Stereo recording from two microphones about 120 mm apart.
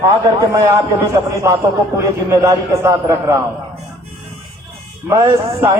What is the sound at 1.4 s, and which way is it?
A man's voice, 25° right (ahead or behind).